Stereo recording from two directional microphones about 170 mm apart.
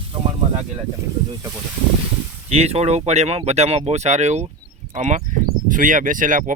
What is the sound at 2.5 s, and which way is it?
Speech, 40° right (ahead or behind).